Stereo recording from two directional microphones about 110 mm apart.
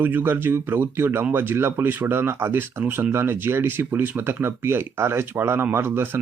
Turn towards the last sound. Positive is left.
turn(degrees=-20)  # may be behind; listen again after turning